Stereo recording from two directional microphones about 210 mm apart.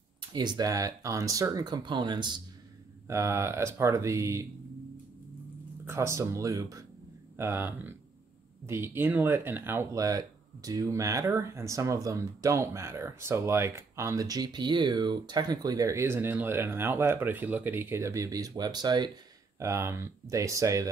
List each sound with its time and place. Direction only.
0.3 s speech: 20° right (ahead or behind)
5.9 s speech: 15° right (ahead or behind)